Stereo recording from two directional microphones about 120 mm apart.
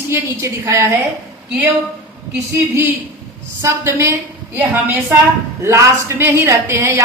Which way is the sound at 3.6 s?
25° right (ahead or behind).